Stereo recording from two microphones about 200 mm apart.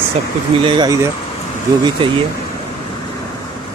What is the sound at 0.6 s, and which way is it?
Speech, 20° right (ahead or behind).